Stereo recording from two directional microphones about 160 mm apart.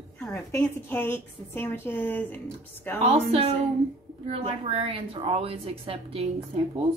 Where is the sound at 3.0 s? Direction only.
40° right (ahead or behind).